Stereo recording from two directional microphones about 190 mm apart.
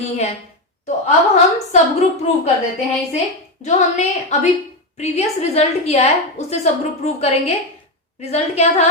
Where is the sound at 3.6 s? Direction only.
40° left (ahead or behind).